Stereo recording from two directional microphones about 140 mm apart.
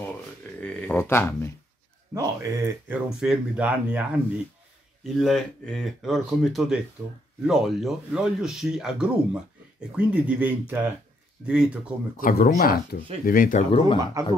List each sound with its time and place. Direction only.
0.6 s speech: 10° left (ahead or behind)
2.1 s speech: 25° right (ahead or behind)
2.9 s speech: 5° right (ahead or behind)
5.0 s speech: centre (ahead or behind)
12.2 s speech: 80° left
13.7 s speech: 40° left (ahead or behind)
14.2 s speech: 20° right (ahead or behind)